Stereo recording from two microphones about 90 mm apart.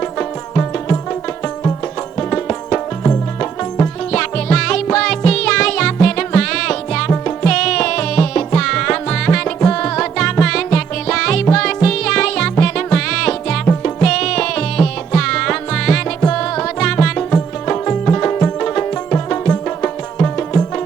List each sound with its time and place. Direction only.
0.0 s music: 20° left (ahead or behind)
2.1 s music: 15° left (ahead or behind)